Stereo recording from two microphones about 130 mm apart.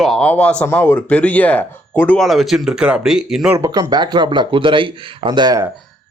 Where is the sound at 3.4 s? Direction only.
25° right (ahead or behind).